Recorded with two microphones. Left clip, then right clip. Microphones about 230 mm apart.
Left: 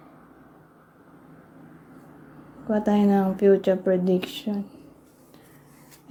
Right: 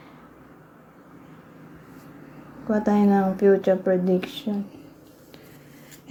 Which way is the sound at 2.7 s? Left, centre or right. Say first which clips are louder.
Right 1 dB; centre.